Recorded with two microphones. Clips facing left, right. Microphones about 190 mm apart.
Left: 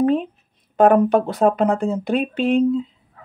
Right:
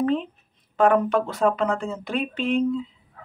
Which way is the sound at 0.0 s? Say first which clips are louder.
Left 5 dB; 50° left (ahead or behind).